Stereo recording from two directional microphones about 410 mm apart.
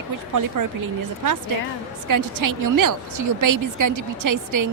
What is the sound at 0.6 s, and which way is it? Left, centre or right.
Speech, right.